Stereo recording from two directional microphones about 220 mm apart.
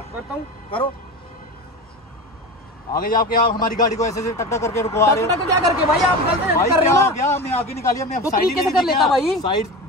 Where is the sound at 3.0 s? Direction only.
40° left (ahead or behind).